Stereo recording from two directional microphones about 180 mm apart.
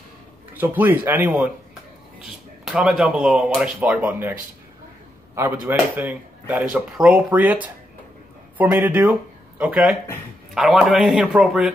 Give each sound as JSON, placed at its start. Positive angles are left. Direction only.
{"t": 0.6, "sound": "speech", "side_deg": -10}
{"t": 2.6, "sound": "speech", "side_deg": -5}